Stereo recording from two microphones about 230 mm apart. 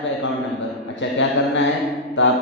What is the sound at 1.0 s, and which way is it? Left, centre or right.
Speech, left.